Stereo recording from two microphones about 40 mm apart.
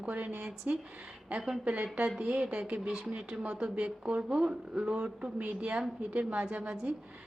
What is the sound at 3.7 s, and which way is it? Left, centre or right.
A woman's voice, right.